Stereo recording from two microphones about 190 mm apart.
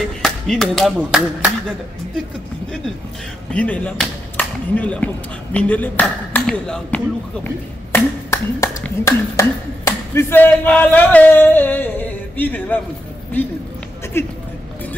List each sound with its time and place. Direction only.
0.2 s speech: centre (ahead or behind)
3.5 s speech: 5° left (ahead or behind)
14.2 s speech: 10° left (ahead or behind)